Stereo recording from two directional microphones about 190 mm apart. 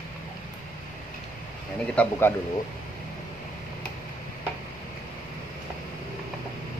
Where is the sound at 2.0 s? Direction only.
10° left (ahead or behind).